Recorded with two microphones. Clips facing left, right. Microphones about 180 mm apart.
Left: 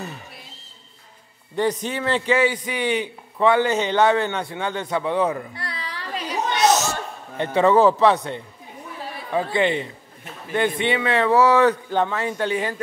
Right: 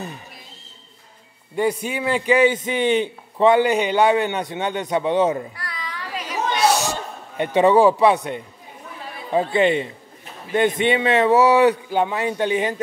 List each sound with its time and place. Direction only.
1.6 s a man's voice: 10° right (ahead or behind)
5.5 s a sound: 30° left (ahead or behind)
6.6 s speech: 10° right (ahead or behind)